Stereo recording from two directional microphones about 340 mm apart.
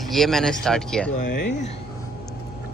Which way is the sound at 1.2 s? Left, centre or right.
Left.